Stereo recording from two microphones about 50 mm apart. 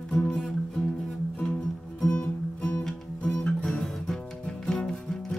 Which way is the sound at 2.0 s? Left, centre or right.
Centre.